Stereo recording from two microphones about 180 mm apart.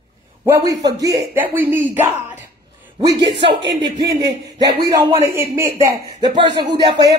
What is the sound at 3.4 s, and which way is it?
Speech, 30° right (ahead or behind).